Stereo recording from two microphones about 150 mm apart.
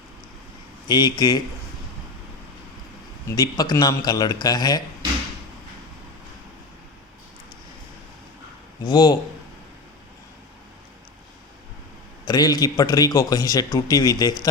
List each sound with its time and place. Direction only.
0.9 s a man's voice: 30° left (ahead or behind)
3.2 s a man's voice: 25° left (ahead or behind)
8.8 s a man's voice: 25° left (ahead or behind)
12.2 s a man's voice: 25° left (ahead or behind)